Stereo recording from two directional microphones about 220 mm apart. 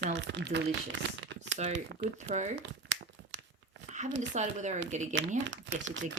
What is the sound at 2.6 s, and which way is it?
Crumpling, 50° right (ahead or behind).